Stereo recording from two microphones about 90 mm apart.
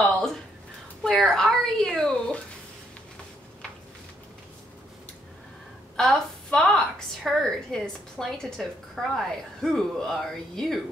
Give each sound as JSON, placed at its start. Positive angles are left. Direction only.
{"t": 1.0, "sound": "a woman's voice", "side_deg": 5}
{"t": 5.9, "sound": "a woman's voice", "side_deg": 5}